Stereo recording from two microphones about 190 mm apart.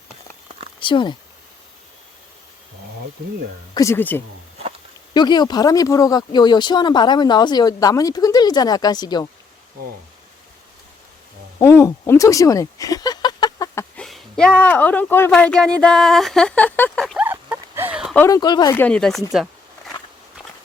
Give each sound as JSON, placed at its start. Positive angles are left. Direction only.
{"t": 0.8, "sound": "speech", "side_deg": 25}
{"t": 3.8, "sound": "speech", "side_deg": 15}
{"t": 5.1, "sound": "speech", "side_deg": 25}
{"t": 11.6, "sound": "speech", "side_deg": 15}
{"t": 13.9, "sound": "speech", "side_deg": 5}
{"t": 17.2, "sound": "a sound", "side_deg": -15}
{"t": 18.1, "sound": "speech", "side_deg": 15}